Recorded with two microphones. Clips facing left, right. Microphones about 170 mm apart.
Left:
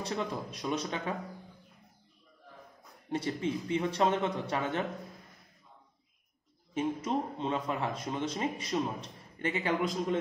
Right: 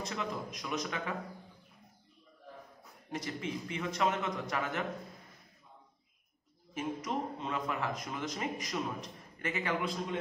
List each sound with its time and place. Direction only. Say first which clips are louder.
0.0 s a man's voice: left 3 dB; 30° left (ahead or behind)
3.1 s speech: left 6 dB; 30° left (ahead or behind)
6.7 s speech: left 5 dB; 30° left (ahead or behind)